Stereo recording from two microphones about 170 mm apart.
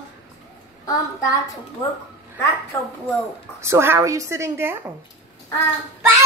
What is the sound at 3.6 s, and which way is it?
A woman's voice, 15° right (ahead or behind).